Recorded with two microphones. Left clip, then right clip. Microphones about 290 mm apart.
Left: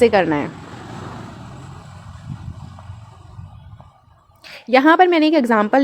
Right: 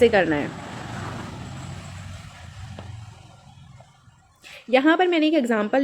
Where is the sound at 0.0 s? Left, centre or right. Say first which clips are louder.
Left 3 dB; left.